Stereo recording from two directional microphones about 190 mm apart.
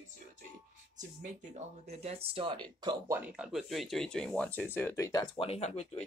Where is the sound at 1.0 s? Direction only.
40° right (ahead or behind).